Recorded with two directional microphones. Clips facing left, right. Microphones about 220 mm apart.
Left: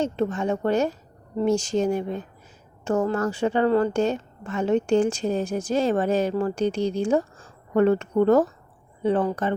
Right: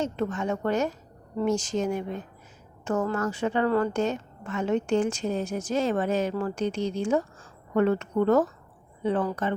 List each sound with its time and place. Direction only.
0.0 s a woman's voice: 30° left (ahead or behind)